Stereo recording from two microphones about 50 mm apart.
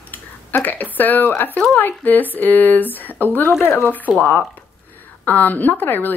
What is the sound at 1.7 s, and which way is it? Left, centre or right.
Speech, left.